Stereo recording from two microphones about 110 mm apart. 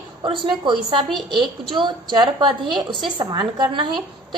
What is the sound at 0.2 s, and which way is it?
A woman's voice, 45° right (ahead or behind).